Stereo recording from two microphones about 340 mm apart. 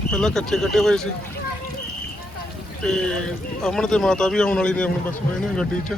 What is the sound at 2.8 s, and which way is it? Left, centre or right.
Speech, centre.